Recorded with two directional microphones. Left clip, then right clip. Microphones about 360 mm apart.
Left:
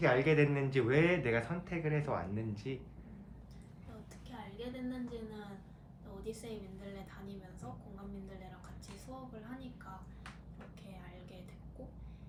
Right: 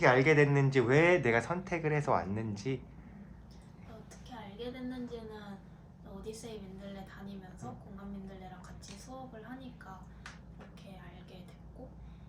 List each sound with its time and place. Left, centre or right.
0.0 s speech: centre
4.5 s a sound: centre
6.3 s music: centre